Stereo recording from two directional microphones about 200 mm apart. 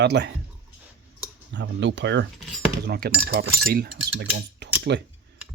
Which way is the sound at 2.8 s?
55° right (ahead or behind).